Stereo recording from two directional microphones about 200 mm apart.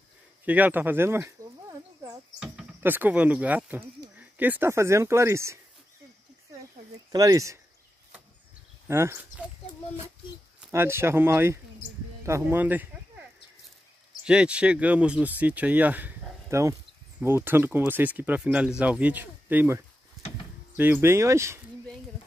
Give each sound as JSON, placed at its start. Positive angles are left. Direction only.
{"t": 0.5, "sound": "speech", "side_deg": -10}
{"t": 7.1, "sound": "speech", "side_deg": -20}
{"t": 8.8, "sound": "speech", "side_deg": -15}
{"t": 10.7, "sound": "speech", "side_deg": -10}
{"t": 14.2, "sound": "speech", "side_deg": -5}